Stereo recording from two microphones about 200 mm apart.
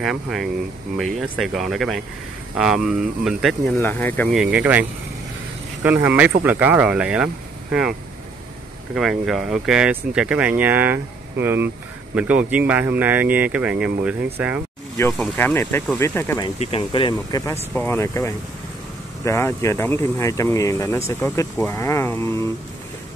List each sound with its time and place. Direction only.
0.0 s speech: centre (ahead or behind)
3.8 s speech: 10° left (ahead or behind)
4.3 s speech: 5° right (ahead or behind)
8.9 s speech: centre (ahead or behind)
15.1 s speech: 10° left (ahead or behind)
16.5 s speech: 25° left (ahead or behind)
17.7 s speech: 10° left (ahead or behind)